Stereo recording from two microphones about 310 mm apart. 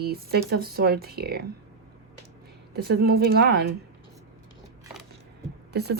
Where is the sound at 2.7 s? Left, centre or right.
Right.